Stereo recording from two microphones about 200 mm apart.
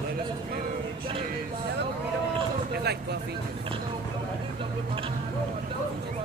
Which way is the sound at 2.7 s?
55° right (ahead or behind).